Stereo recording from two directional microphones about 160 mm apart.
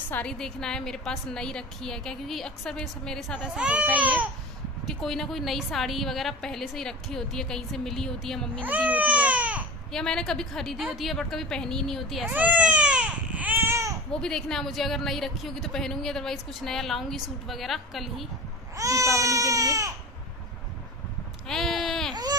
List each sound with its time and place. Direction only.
0.1 s a woman's voice: 5° left (ahead or behind)
3.5 s speech: 10° right (ahead or behind)
4.8 s a woman's voice: centre (ahead or behind)
8.6 s speech: 10° right (ahead or behind)
9.9 s a woman's voice: 5° left (ahead or behind)
12.3 s baby cry: 10° right (ahead or behind)
14.2 s a woman's voice: 5° left (ahead or behind)
18.8 s baby cry: 20° right (ahead or behind)
21.5 s sheep: centre (ahead or behind)